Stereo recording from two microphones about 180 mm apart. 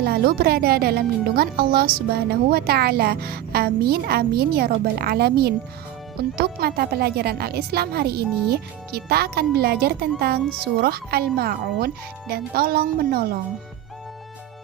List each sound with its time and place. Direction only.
0.0 s speech: 60° right (ahead or behind)